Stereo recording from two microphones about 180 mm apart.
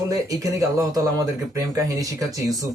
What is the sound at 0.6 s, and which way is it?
Speech, 20° right (ahead or behind).